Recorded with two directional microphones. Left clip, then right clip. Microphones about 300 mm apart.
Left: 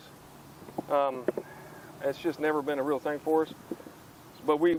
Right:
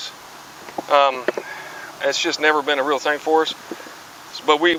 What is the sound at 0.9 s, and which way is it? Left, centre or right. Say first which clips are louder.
Speech: right 12 dB; centre.